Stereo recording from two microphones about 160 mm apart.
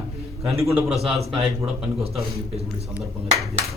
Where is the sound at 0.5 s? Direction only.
20° right (ahead or behind).